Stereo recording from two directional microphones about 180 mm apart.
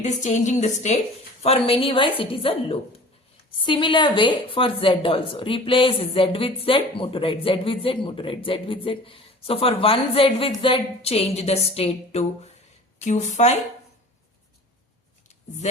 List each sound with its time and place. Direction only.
0.0 s a woman's voice: 40° left (ahead or behind)